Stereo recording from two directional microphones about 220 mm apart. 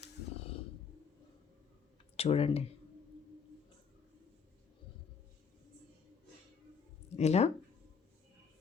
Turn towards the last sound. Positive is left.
turn(degrees=30)  # may be behind; listen again after turning